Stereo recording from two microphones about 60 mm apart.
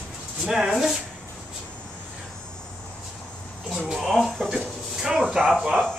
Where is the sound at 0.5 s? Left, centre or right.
Centre.